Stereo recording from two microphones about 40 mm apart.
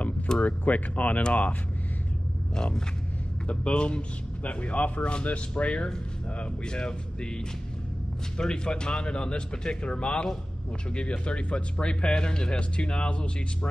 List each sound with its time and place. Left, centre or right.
0.4 s a man's voice: left
2.5 s speech: centre
3.4 s a man's voice: left
8.4 s speech: left